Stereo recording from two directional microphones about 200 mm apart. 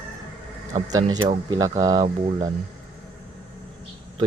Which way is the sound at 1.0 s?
25° right (ahead or behind).